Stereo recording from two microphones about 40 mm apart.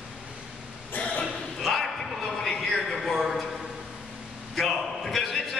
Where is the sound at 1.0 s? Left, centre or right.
Left.